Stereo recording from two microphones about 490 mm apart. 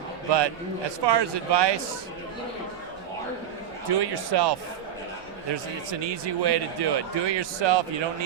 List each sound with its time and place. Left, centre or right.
0.3 s speech: right
3.8 s speech: right